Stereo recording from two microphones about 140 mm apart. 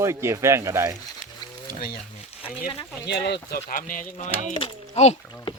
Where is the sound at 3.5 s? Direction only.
75° left (ahead or behind).